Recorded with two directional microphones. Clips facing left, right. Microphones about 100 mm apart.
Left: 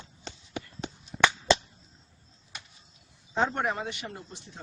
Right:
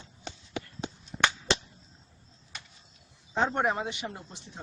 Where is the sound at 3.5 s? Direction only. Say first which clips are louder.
Right 2 dB; 15° right (ahead or behind).